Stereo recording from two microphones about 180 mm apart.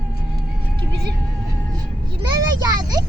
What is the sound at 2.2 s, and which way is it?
Speech, 25° right (ahead or behind).